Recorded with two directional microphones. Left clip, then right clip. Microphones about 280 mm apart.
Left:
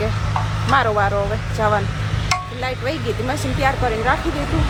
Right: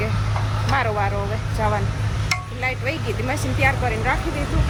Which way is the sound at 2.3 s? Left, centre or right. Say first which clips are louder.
Left 2 dB; centre.